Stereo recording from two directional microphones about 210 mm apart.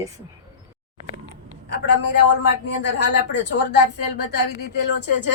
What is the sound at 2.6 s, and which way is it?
Speech, 55° left (ahead or behind).